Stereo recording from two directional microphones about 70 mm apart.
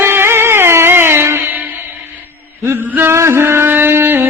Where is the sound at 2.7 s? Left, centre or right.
Right.